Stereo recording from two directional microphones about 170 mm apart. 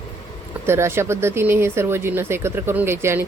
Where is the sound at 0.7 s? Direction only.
15° right (ahead or behind).